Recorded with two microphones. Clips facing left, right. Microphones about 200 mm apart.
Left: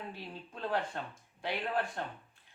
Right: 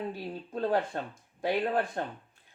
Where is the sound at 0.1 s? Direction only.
40° right (ahead or behind).